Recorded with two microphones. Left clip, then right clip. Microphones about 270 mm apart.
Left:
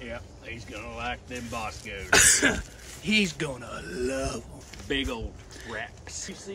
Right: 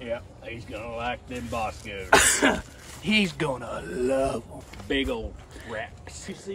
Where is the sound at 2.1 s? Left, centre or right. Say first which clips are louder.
Right 1 dB; right.